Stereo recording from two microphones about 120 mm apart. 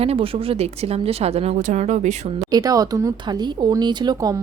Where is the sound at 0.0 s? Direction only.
55° right (ahead or behind); by 2.1 s 70° right (ahead or behind).